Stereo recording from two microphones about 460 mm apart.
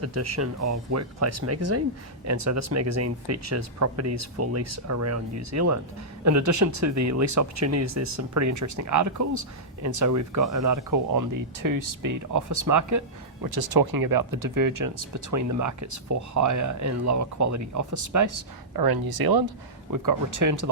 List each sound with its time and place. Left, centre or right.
0.0 s speech: right
13.5 s speech: right